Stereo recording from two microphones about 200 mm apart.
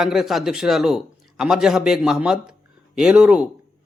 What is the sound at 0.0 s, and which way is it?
A man's voice, centre (ahead or behind).